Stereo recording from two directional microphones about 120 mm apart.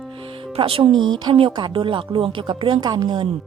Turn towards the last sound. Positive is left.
turn(degrees=-40)  # may be behind; listen again after turning